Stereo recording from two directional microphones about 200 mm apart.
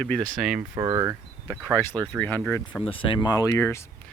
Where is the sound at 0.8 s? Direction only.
20° right (ahead or behind).